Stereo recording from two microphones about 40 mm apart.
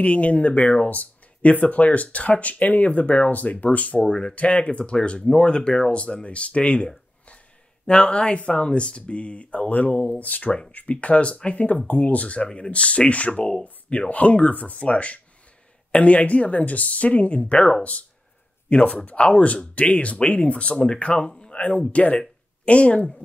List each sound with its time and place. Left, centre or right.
0.0 s speech: left
4.0 s speech: left
11.9 s speech: left